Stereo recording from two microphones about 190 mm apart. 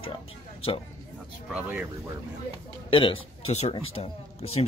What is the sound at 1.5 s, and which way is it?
Speech, 10° right (ahead or behind).